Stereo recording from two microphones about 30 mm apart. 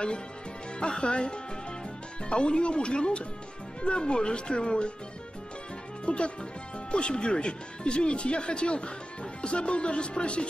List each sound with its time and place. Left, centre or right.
0.7 s speech: left
6.0 s speech: left